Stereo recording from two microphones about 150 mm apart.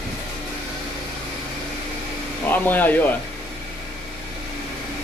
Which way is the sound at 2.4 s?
10° left (ahead or behind).